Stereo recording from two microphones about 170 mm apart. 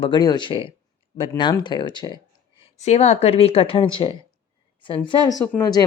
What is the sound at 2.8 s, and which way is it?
Speech, 40° left (ahead or behind).